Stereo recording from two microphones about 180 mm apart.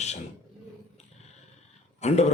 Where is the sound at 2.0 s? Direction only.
35° left (ahead or behind).